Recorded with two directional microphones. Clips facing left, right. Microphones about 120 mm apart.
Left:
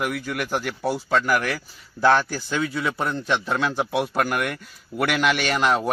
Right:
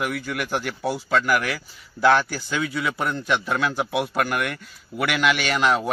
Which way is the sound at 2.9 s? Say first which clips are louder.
Even; 5° right (ahead or behind).